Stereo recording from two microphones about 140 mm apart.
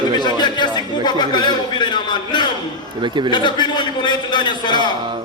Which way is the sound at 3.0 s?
35° right (ahead or behind).